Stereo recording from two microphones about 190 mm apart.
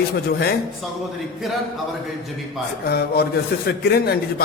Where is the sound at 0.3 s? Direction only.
60° left (ahead or behind).